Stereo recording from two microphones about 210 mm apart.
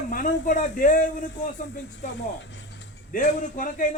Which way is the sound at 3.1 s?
40° left (ahead or behind).